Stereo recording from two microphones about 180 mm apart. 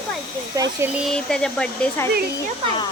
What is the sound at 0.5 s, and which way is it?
Speech, 15° right (ahead or behind).